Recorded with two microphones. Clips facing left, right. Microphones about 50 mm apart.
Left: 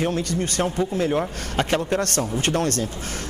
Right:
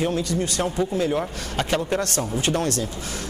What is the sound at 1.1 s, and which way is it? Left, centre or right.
Speech, left.